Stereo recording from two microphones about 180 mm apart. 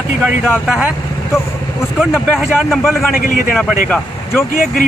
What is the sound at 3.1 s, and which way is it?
Speech, 50° left (ahead or behind).